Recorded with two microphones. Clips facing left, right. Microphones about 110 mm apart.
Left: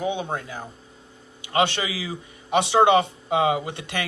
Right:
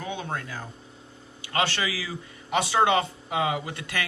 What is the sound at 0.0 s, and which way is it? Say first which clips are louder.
Speech: left 6 dB; 20° left (ahead or behind).